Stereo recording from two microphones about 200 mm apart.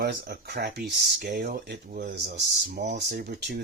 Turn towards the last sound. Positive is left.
turn(degrees=-50)  # may be behind; listen again after turning